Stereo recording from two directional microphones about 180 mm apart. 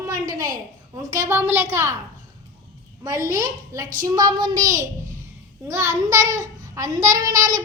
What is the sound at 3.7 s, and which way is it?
Speech, 20° right (ahead or behind).